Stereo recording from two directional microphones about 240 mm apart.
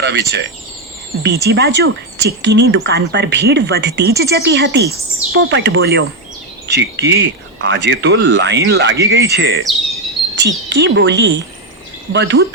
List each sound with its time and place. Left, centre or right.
0.0 s speech: right
10.7 s speech: right